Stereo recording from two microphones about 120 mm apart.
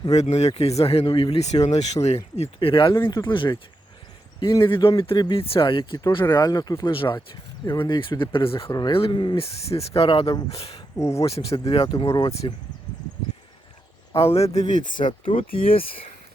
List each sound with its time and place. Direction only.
0.1 s speech: 65° left (ahead or behind)
2.3 s speech: 55° left (ahead or behind)
4.6 s speech: 45° left (ahead or behind)
8.7 s speech: 35° left (ahead or behind)
9.6 s speech: 55° left (ahead or behind)
10.9 s speech: 25° left (ahead or behind)
11.2 s speech: 55° left (ahead or behind)
12.4 s speech: 45° left (ahead or behind)
14.3 s speech: 65° left (ahead or behind); by 15.1 s 90° left
15.2 s speech: 50° left (ahead or behind)